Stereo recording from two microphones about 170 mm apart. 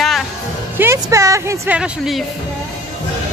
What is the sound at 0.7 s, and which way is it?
A woman's voice, 15° right (ahead or behind).